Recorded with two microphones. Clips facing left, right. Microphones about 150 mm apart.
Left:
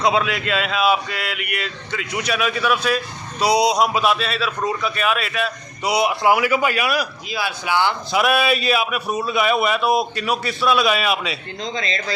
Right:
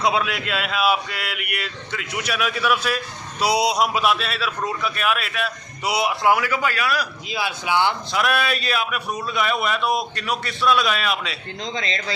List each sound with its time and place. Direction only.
0.0 s a man's voice: 5° right (ahead or behind); by 7.1 s 15° left (ahead or behind)
7.3 s speech: 20° right (ahead or behind)
8.1 s a man's voice: 10° left (ahead or behind)
11.6 s speech: 25° right (ahead or behind)